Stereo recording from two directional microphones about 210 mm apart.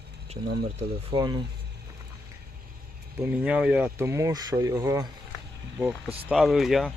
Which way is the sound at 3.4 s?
5° right (ahead or behind).